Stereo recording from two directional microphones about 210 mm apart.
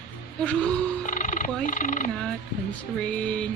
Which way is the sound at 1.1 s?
40° left (ahead or behind).